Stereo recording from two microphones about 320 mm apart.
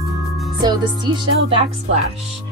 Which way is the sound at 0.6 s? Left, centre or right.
Centre.